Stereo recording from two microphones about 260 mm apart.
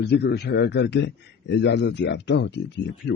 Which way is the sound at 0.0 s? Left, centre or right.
Left.